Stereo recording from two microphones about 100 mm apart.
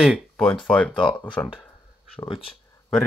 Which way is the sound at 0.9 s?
55° left (ahead or behind).